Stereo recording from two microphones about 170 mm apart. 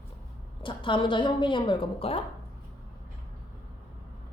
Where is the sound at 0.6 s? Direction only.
30° left (ahead or behind).